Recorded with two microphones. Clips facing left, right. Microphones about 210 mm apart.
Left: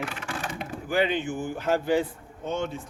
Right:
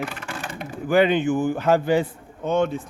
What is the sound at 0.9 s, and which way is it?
A man's voice, 60° right (ahead or behind).